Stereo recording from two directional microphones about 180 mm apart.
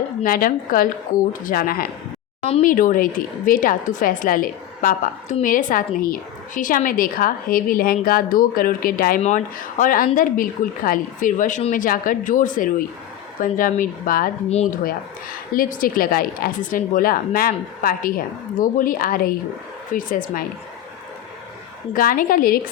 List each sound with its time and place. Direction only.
0.2 s a woman's voice: 50° left (ahead or behind)
15.5 s a woman's voice: 50° left (ahead or behind)
21.9 s a woman's voice: 50° left (ahead or behind)